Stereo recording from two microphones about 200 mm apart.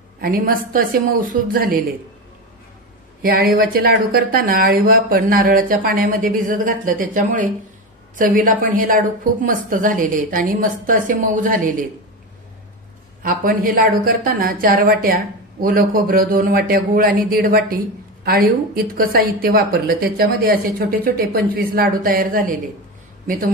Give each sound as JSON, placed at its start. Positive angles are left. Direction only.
{"t": 0.2, "sound": "speech", "side_deg": -45}
{"t": 3.2, "sound": "speech", "side_deg": -45}
{"t": 13.2, "sound": "a woman's voice", "side_deg": -45}